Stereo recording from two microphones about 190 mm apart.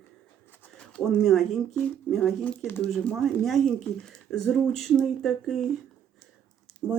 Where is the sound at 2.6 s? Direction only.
10° left (ahead or behind).